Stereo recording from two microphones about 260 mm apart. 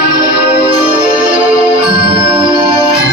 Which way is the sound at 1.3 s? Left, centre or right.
Centre.